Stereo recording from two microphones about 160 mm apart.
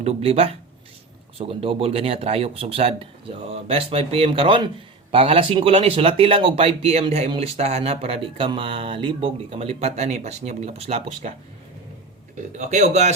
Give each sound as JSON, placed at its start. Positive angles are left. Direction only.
{"t": 0.0, "sound": "speech", "side_deg": -40}
{"t": 12.5, "sound": "speech", "side_deg": -45}